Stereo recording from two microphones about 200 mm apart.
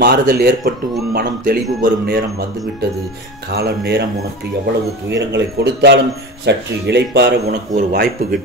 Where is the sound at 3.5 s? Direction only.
55° right (ahead or behind).